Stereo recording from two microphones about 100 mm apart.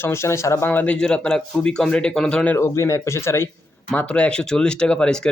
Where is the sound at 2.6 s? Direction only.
30° left (ahead or behind).